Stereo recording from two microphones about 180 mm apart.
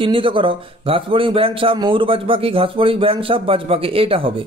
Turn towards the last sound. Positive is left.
turn(degrees=-30)  # may be behind; listen again after turning